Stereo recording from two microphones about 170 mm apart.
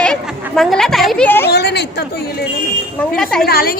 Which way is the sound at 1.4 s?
75° left (ahead or behind).